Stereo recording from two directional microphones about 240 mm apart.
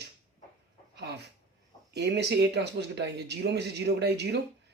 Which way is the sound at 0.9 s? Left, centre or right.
Right.